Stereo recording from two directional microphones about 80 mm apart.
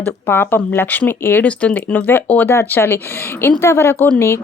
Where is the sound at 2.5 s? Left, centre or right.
Left.